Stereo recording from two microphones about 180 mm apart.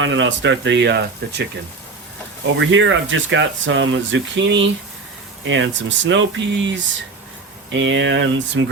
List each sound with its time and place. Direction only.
0.0 s speech: 90° right; by 1.5 s 70° right (ahead or behind)
2.6 s speech: 90° right